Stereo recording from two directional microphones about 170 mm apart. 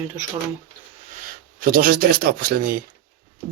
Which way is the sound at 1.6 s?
55° right (ahead or behind).